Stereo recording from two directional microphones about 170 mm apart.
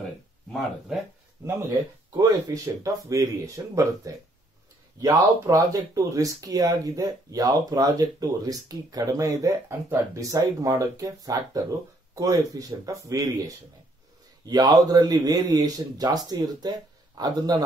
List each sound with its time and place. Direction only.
0.5 s speech: centre (ahead or behind)
1.4 s speech: 20° right (ahead or behind)